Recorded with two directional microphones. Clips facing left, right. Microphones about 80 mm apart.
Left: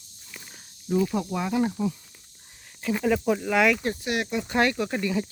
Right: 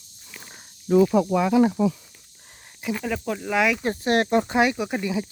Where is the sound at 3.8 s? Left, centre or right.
Right.